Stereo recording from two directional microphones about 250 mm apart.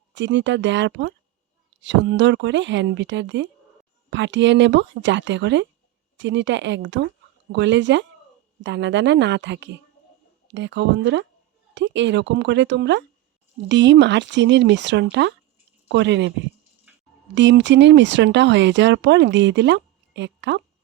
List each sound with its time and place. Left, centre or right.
0.1 s speech: right
16.9 s a sound: centre
17.3 s speech: right